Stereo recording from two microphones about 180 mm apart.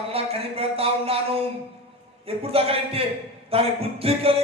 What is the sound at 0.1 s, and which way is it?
A man's voice, 35° right (ahead or behind).